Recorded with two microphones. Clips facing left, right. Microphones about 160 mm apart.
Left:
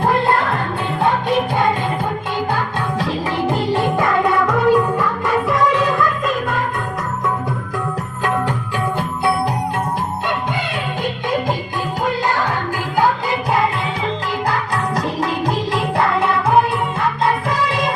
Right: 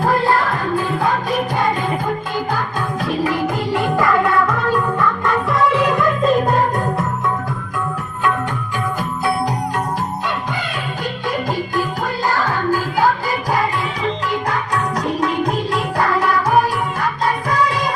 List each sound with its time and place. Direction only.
0.0 s music: 25° left (ahead or behind)
3.2 s music: 25° left (ahead or behind); by 5.5 s 10° left (ahead or behind)
14.9 s music: 30° left (ahead or behind)